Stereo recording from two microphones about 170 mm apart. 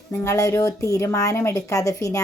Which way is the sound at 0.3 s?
20° left (ahead or behind).